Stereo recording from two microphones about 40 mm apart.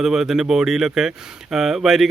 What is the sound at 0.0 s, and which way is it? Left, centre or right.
Speech, centre.